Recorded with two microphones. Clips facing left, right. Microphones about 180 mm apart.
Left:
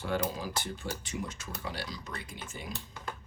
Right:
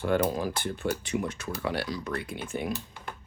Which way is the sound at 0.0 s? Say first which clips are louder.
Right 7 dB; 55° right (ahead or behind).